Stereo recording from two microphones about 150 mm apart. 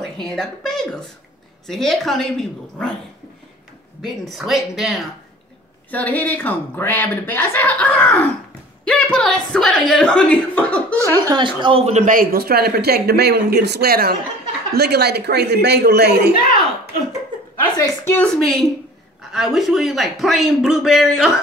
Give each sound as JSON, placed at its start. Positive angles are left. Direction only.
{"t": 0.2, "sound": "a woman's voice", "side_deg": 5}
{"t": 4.0, "sound": "a man's voice", "side_deg": 0}
{"t": 5.9, "sound": "a woman's voice", "side_deg": 10}
{"t": 11.0, "sound": "speech", "side_deg": -25}
{"t": 17.7, "sound": "a woman's voice", "side_deg": 25}
{"t": 18.1, "sound": "a man's voice", "side_deg": 5}